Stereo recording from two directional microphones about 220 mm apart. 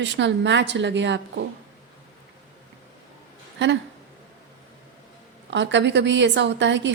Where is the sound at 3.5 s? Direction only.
55° right (ahead or behind).